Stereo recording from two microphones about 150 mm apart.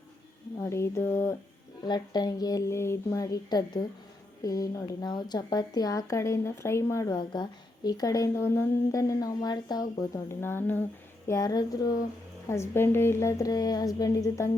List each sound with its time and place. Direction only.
0.6 s speech: 20° left (ahead or behind)
1.9 s speech: 25° left (ahead or behind)
11.3 s speech: 25° left (ahead or behind)